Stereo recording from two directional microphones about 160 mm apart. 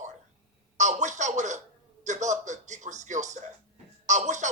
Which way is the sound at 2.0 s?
50° right (ahead or behind).